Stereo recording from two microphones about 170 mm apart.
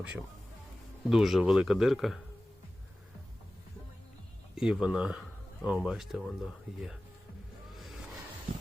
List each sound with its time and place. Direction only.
0.0 s speech: 5° right (ahead or behind)
4.5 s speech: 5° right (ahead or behind)
7.8 s music: centre (ahead or behind)